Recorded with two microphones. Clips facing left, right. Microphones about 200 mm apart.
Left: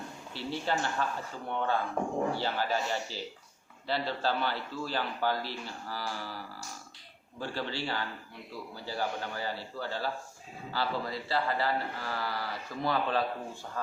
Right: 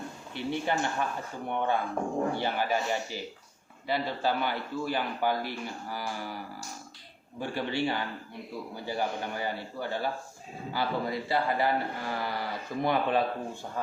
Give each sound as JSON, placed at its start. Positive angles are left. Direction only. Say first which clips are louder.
{"t": 0.3, "sound": "a man's voice", "louder": "right 3 dB", "side_deg": -15}